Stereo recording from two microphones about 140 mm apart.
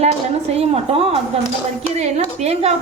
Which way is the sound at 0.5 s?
45° right (ahead or behind).